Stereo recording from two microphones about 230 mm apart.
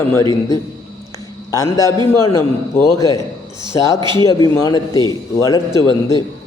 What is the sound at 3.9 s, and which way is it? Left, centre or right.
Speech, centre.